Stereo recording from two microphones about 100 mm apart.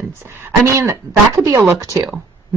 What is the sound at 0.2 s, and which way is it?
Speech, 25° right (ahead or behind).